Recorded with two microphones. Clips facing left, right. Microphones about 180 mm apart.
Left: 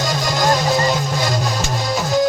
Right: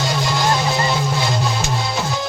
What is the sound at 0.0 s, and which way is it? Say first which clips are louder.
Music: left 1 dB; 45° left (ahead or behind).